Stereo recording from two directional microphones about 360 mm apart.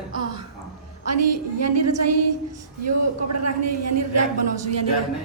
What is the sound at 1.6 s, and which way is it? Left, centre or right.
A woman's voice, right.